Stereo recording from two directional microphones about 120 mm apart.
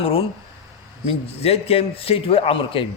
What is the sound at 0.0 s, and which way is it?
Speech, 50° left (ahead or behind).